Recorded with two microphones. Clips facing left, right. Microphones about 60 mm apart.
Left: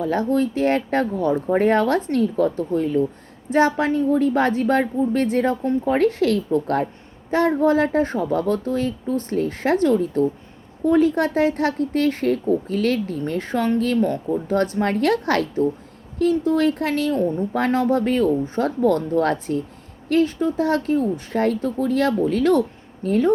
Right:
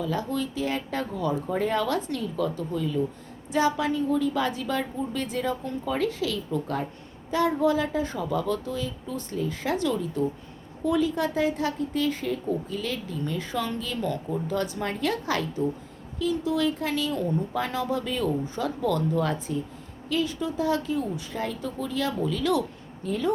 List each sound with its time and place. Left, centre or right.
0.0 s speech: left
5.6 s a woman's voice: left
6.0 s speech: left
14.0 s speech: left
16.6 s speech: left
19.3 s speech: left